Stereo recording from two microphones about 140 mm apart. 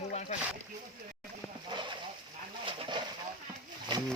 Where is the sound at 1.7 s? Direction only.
35° right (ahead or behind).